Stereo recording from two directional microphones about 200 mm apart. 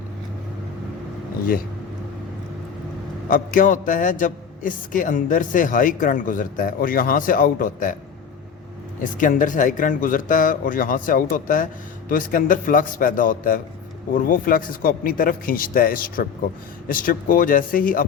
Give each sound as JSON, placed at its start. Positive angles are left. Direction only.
{"t": 3.2, "sound": "a man's voice", "side_deg": 45}
{"t": 9.0, "sound": "a man's voice", "side_deg": 40}